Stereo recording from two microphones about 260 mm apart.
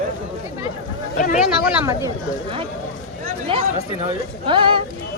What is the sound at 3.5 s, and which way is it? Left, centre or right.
Speech, right.